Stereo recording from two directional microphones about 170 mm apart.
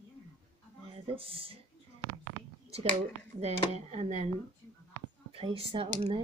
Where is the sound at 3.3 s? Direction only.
40° right (ahead or behind).